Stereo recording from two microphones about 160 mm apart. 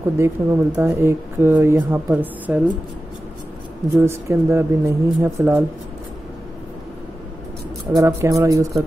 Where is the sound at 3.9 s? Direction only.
15° right (ahead or behind).